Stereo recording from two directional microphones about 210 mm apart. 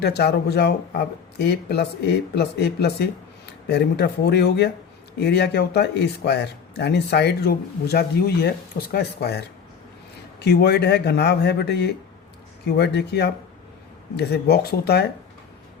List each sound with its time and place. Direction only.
0.0 s speech: 50° left (ahead or behind)
10.4 s speech: 50° left (ahead or behind)